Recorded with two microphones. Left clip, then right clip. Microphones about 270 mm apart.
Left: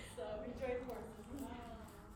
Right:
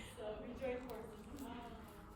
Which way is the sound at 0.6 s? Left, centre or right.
Centre.